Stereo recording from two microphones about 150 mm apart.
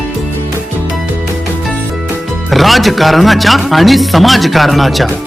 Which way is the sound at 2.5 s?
Centre (ahead or behind).